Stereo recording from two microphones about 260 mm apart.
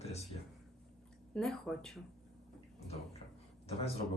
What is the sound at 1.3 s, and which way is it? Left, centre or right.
Speech, centre.